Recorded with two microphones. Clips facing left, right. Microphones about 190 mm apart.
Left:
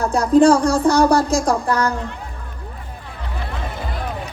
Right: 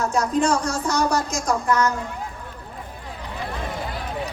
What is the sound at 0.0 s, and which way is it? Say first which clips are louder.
Speech: left 8 dB; 35° left (ahead or behind).